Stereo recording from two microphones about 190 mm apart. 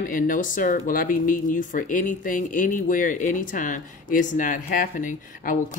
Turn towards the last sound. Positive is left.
turn(degrees=45)  # may be behind; listen again after turning